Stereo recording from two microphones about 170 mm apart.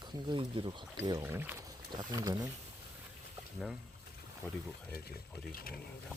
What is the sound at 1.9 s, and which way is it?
Speech, 25° right (ahead or behind).